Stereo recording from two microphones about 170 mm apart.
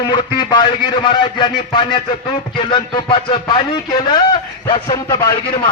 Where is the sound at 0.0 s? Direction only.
25° left (ahead or behind).